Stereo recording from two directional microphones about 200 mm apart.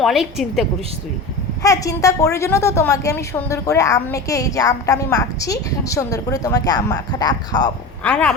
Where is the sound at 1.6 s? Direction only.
15° left (ahead or behind).